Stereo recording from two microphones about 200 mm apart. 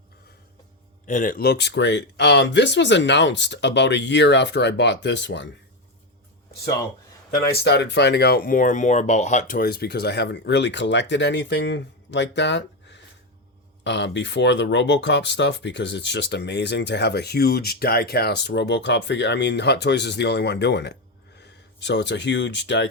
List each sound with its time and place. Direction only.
1.0 s speech: 40° left (ahead or behind); by 5.5 s 60° left (ahead or behind)
7.3 s speech: 50° left (ahead or behind)